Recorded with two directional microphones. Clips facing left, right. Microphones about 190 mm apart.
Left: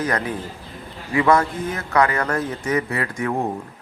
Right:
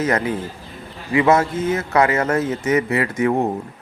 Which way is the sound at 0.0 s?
25° right (ahead or behind).